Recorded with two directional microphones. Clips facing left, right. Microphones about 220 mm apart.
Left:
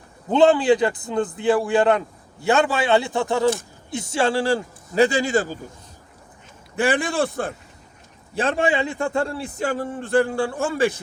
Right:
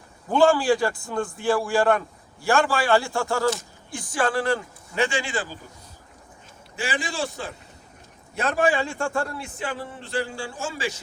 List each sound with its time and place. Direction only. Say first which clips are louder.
0.3 s a man's voice: left 3 dB; 20° left (ahead or behind); by 5.5 s 45° left (ahead or behind)
6.7 s speech: left 8 dB; 55° left (ahead or behind)
8.4 s a man's voice: left 2 dB; 25° left (ahead or behind); by 11.0 s 55° left (ahead or behind)